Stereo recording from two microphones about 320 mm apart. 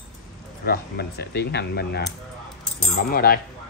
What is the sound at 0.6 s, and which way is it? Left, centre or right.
Speech, left.